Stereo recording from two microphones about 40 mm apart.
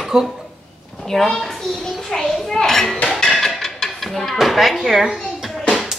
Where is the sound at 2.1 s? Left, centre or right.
Centre.